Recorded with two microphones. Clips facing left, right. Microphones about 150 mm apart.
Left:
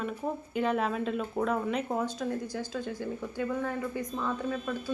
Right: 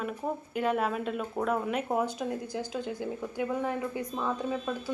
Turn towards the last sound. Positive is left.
turn(degrees=-15)  # may be behind; listen again after turning